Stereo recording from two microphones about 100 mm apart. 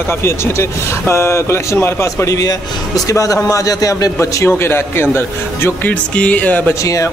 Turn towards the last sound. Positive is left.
turn(degrees=15)  # may be behind; listen again after turning